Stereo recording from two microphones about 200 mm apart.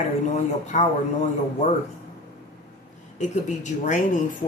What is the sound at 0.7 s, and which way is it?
Speech, 35° left (ahead or behind).